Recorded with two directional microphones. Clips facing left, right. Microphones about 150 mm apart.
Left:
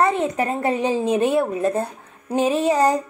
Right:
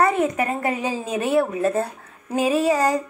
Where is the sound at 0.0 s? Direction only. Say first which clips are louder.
Even; 30° left (ahead or behind).